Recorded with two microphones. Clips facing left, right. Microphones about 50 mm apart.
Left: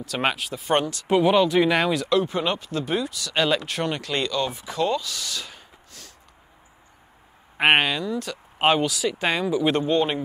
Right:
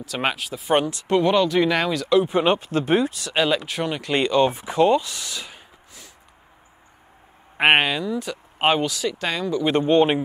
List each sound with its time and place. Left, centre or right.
0.0 s speech: centre
2.2 s speech: right
3.3 s speech: centre
4.0 s speech: right
7.5 s speech: centre
9.2 s speech: centre
9.8 s a man's voice: right